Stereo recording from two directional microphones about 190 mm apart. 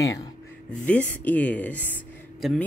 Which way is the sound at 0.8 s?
5° left (ahead or behind).